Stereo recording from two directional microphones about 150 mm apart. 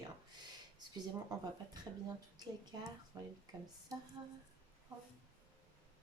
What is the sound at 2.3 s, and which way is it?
Speech, 30° right (ahead or behind).